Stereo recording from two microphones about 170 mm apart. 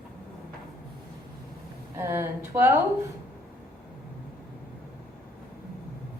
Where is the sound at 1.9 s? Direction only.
15° right (ahead or behind).